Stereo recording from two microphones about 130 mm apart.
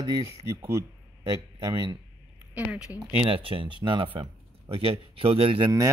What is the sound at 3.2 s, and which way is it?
Speech, 45° right (ahead or behind).